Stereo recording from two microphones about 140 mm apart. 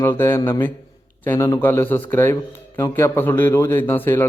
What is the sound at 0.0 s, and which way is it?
A man's voice, 15° left (ahead or behind).